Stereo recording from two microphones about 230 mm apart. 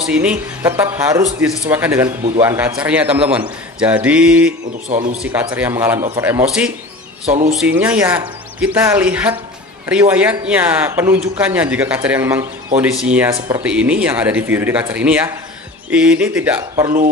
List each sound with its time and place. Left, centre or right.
0.0 s speech: centre
4.8 s a man's voice: right
5.1 s speech: centre